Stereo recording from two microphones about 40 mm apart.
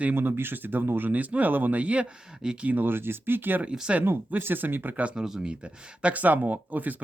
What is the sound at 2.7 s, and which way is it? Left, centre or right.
Speech, right.